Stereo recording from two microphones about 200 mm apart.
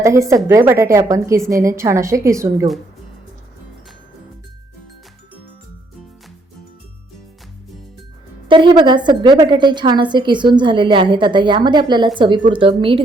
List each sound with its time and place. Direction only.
0.0 s a woman's voice: 15° right (ahead or behind)
8.4 s a woman's voice: 25° right (ahead or behind)